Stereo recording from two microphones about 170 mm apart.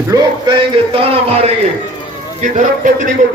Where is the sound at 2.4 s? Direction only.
45° right (ahead or behind).